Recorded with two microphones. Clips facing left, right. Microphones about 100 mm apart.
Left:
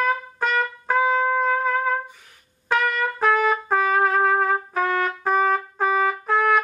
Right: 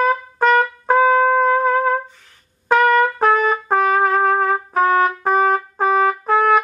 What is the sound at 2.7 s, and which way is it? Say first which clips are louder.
Trumpet: right 8 dB; 55° right (ahead or behind).